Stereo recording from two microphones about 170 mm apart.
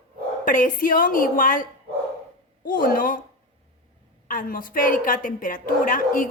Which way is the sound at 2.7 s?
55° left (ahead or behind).